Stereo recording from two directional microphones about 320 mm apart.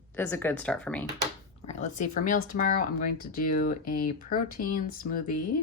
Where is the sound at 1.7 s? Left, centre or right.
Left.